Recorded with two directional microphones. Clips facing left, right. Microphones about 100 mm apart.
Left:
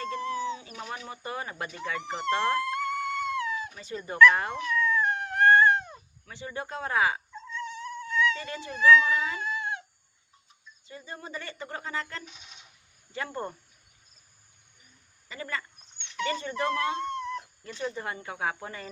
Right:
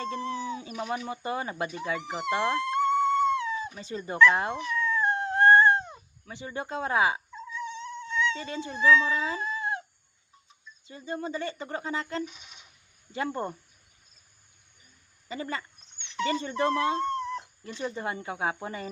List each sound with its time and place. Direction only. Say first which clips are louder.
0.0 s a sound: even; 30° right (ahead or behind)
1.0 s speech: right 4 dB; 25° right (ahead or behind)
2.0 s dog: left 2 dB; 5° right (ahead or behind); by 5.9 s 30° right (ahead or behind)
6.2 s speech: right 1 dB; 25° right (ahead or behind)
7.5 s mosquito: even; 20° right (ahead or behind)
10.8 s speech: right 7 dB; 25° right (ahead or behind)
15.3 s speech: right 2 dB; 25° right (ahead or behind)